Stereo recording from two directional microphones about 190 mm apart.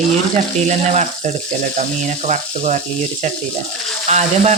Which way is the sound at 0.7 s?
40° right (ahead or behind).